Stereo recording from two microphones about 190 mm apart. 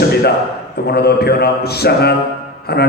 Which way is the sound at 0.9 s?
55° left (ahead or behind).